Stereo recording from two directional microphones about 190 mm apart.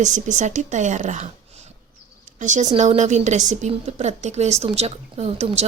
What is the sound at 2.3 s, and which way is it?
Speech, 40° right (ahead or behind).